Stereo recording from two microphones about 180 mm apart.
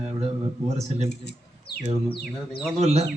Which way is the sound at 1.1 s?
70° left (ahead or behind).